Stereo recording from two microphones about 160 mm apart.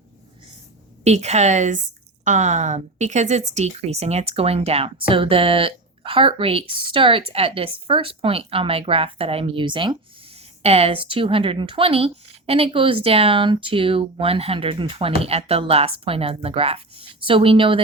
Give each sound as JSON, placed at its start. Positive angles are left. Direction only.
{"t": 1.0, "sound": "a woman's voice", "side_deg": -45}